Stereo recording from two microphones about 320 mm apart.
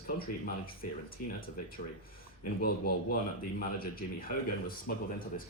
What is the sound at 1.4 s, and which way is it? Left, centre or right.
Speech, left.